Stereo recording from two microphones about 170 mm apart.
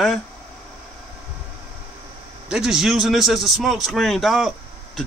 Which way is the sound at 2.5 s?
5° right (ahead or behind).